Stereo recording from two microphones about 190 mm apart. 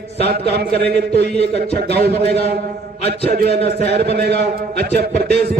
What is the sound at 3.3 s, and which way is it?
A man's voice, 55° right (ahead or behind).